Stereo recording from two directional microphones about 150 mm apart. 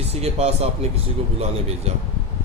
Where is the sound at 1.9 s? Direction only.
45° right (ahead or behind).